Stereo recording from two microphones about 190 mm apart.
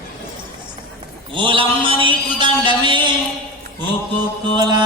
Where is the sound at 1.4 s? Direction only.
25° right (ahead or behind).